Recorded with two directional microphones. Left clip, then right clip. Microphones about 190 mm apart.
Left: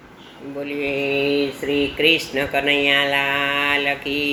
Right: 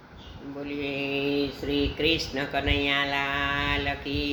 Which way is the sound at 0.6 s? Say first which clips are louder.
Left 8 dB; 15° right (ahead or behind).